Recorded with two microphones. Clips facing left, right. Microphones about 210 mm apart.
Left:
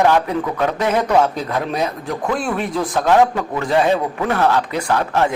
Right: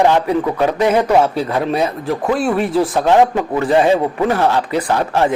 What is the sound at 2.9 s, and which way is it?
A man's voice, 15° right (ahead or behind).